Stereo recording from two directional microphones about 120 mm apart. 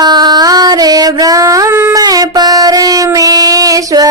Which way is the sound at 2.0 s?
35° right (ahead or behind).